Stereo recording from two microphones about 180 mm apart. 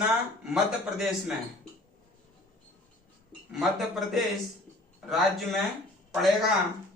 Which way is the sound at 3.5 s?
Centre (ahead or behind).